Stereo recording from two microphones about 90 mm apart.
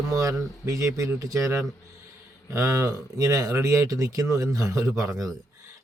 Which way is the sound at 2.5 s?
35° right (ahead or behind).